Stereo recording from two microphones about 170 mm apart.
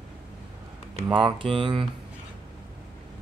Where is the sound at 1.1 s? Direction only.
30° right (ahead or behind).